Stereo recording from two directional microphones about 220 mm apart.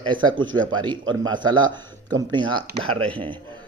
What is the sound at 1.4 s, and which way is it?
Speech, 20° right (ahead or behind).